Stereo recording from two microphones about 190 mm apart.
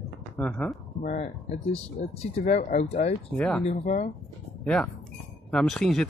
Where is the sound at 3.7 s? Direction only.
35° left (ahead or behind).